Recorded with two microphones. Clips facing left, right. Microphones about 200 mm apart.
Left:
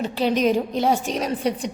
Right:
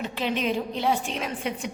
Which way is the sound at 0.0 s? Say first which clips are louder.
Left 7 dB; 35° left (ahead or behind).